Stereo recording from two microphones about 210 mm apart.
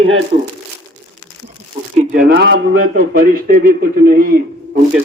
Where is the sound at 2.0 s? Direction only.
40° right (ahead or behind).